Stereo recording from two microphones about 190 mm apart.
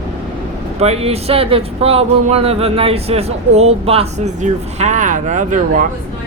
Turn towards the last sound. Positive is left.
turn(degrees=-40)  # may be behind; listen again after turning